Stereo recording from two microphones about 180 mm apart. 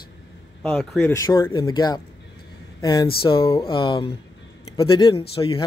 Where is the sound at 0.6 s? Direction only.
10° left (ahead or behind).